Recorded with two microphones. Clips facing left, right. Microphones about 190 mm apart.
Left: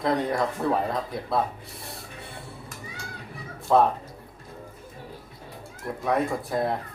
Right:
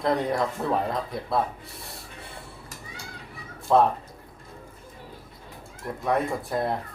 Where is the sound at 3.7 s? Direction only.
Centre (ahead or behind).